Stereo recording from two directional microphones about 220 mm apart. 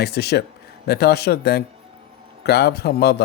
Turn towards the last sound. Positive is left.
turn(degrees=45)  # may be behind; listen again after turning